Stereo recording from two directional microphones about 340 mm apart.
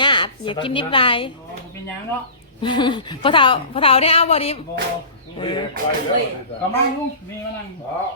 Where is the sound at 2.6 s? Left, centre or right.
Centre.